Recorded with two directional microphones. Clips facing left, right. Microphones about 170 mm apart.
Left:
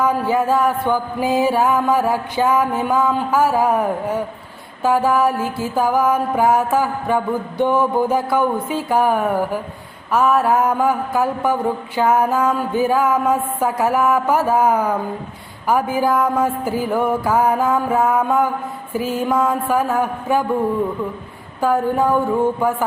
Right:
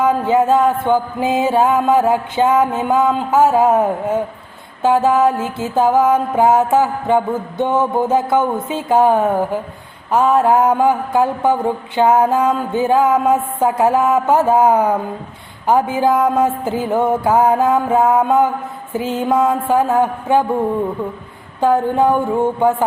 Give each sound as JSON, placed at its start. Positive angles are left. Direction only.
{"t": 0.0, "sound": "mantra", "side_deg": -20}
{"t": 21.6, "sound": "mantra", "side_deg": -25}